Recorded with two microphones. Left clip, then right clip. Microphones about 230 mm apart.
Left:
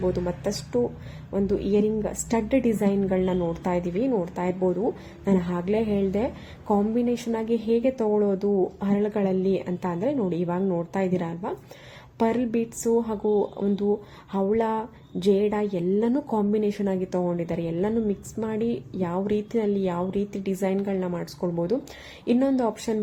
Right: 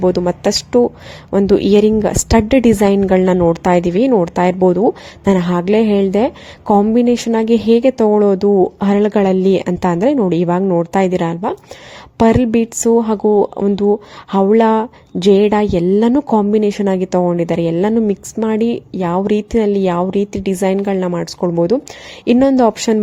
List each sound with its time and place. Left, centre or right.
0.0 s a woman's voice: right